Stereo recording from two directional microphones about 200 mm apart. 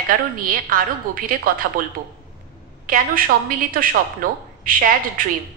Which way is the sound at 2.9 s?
45° right (ahead or behind).